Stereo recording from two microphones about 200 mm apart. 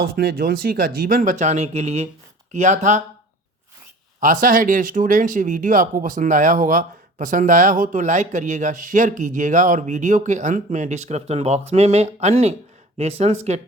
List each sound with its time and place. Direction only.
0.0 s speech: 50° right (ahead or behind)
4.2 s speech: 45° right (ahead or behind)